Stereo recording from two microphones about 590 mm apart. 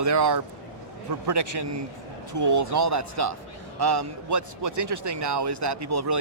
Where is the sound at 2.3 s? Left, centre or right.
Right.